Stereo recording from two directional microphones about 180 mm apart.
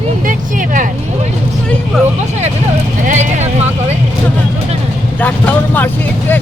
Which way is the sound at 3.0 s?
40° right (ahead or behind).